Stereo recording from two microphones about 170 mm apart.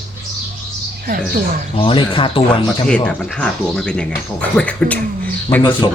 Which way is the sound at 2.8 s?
5° left (ahead or behind).